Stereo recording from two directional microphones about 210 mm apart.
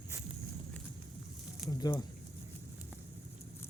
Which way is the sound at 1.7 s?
20° left (ahead or behind).